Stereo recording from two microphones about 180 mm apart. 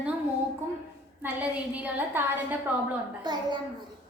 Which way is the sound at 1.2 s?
10° right (ahead or behind).